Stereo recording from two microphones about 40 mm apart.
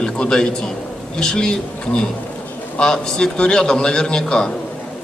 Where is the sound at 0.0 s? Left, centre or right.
Centre.